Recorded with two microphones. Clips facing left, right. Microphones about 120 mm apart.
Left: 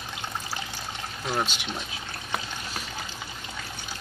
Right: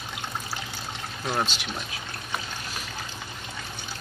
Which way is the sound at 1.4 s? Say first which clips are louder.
Right 1 dB; 15° left (ahead or behind).